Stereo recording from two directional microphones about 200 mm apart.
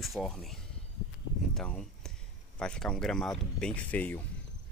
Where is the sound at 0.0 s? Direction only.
Centre (ahead or behind).